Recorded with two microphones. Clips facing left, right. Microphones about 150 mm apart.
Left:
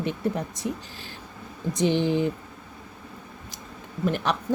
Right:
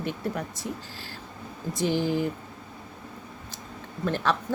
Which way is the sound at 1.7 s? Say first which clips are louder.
Left 3 dB; 20° left (ahead or behind).